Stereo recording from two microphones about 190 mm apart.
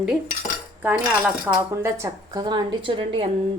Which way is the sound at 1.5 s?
15° right (ahead or behind).